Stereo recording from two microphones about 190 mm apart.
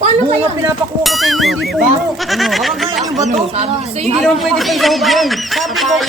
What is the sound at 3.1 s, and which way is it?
Speech, 35° right (ahead or behind).